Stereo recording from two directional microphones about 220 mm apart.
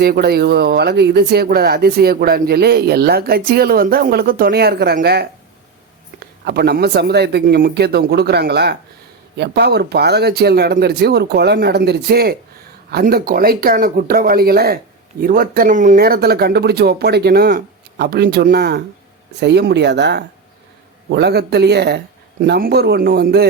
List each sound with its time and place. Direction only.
0.0 s speech: 45° right (ahead or behind)
6.4 s speech: 45° right (ahead or behind)